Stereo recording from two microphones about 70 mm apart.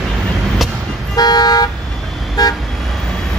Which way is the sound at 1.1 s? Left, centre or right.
Left.